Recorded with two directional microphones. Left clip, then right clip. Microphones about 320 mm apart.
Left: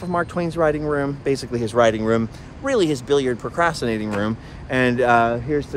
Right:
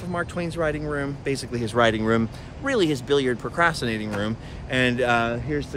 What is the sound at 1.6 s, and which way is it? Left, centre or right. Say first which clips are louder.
Speech: left 3 dB; centre.